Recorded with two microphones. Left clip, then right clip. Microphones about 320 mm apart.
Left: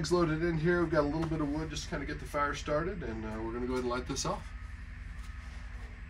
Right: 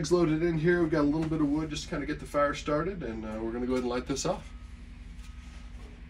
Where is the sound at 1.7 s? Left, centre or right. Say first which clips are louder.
Right 4 dB; left.